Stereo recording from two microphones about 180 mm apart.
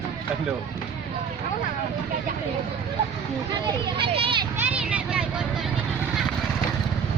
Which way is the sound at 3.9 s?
30° right (ahead or behind).